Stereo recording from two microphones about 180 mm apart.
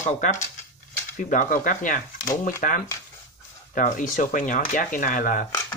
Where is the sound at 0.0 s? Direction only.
40° left (ahead or behind).